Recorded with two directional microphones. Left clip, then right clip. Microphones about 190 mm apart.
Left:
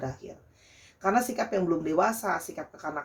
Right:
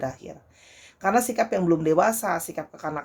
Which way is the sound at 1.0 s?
55° right (ahead or behind).